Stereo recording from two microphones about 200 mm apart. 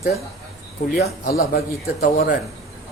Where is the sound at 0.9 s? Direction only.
45° left (ahead or behind).